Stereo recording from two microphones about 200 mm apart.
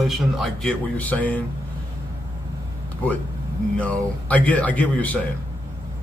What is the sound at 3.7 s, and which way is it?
Speech, 5° left (ahead or behind).